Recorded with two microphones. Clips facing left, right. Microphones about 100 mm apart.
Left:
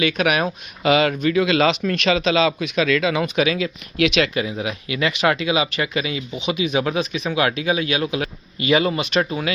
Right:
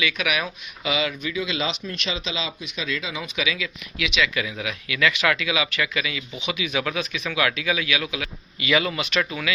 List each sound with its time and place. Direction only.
0.0 s speech: 40° left (ahead or behind); by 3.2 s 65° left (ahead or behind)
3.3 s speech: 45° left (ahead or behind)
4.4 s speech: 30° left (ahead or behind)